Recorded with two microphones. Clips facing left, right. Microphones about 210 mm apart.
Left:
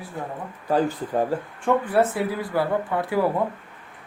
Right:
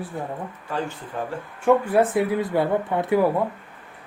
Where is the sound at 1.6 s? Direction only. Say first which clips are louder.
Right 3 dB; 15° right (ahead or behind).